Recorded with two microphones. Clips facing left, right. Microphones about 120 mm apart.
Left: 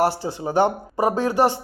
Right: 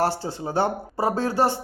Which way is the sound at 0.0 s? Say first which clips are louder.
Left 3 dB; 15° left (ahead or behind).